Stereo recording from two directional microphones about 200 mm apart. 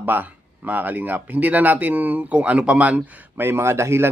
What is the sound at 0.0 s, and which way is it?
Speech, 10° right (ahead or behind).